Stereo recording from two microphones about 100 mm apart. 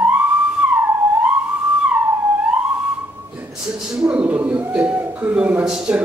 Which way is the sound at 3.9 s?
10° right (ahead or behind).